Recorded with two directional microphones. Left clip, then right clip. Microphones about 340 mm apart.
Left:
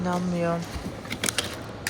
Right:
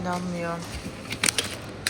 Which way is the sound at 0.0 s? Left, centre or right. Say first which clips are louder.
Left 3 dB; centre.